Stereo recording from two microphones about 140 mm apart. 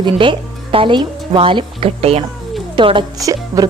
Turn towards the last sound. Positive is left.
turn(degrees=-25)  # may be behind; listen again after turning